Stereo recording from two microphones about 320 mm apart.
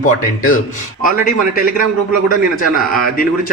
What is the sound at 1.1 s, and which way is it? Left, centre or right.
Speech, left.